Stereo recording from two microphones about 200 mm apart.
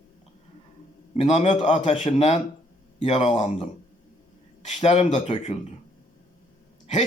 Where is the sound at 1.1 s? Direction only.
30° left (ahead or behind).